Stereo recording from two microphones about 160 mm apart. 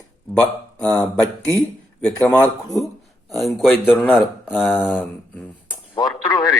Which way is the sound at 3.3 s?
Centre (ahead or behind).